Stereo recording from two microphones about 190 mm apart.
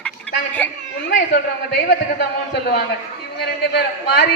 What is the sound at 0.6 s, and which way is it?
Speech, 10° left (ahead or behind).